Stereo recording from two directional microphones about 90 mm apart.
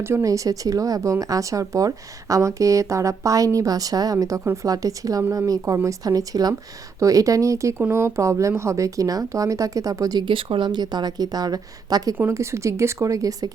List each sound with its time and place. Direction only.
0.0 s speech: 35° right (ahead or behind)
10.2 s a woman's voice: 75° right (ahead or behind); by 12.1 s 45° right (ahead or behind)
12.1 s speech: 30° right (ahead or behind)